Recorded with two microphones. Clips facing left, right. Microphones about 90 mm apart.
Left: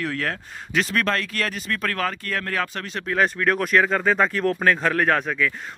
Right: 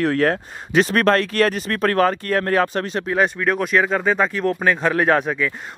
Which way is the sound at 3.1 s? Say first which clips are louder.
Right 1 dB; 5° right (ahead or behind).